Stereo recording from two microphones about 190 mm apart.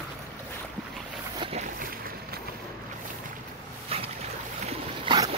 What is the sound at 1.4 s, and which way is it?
Boat, 35° right (ahead or behind).